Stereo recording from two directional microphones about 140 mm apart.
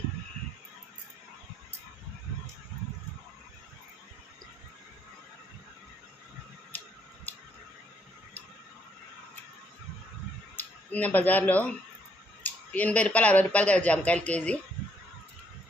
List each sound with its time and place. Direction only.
10.6 s speech: 10° left (ahead or behind)